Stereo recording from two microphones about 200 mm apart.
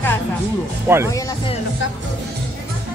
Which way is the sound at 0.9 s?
10° right (ahead or behind).